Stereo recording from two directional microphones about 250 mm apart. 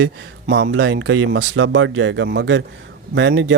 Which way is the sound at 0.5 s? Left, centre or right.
Right.